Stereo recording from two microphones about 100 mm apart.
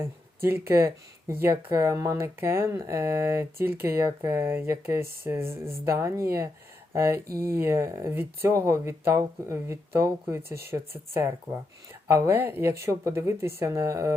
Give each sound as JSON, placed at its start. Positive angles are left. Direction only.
{"t": 0.0, "sound": "speech", "side_deg": -25}